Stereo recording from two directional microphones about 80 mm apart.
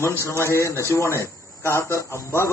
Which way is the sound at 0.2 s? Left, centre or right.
Left.